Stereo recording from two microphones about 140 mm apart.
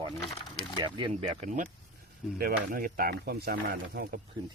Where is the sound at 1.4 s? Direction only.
65° right (ahead or behind).